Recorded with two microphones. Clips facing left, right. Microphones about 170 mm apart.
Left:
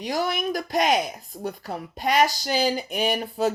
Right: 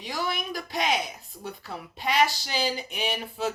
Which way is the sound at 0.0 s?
45° left (ahead or behind).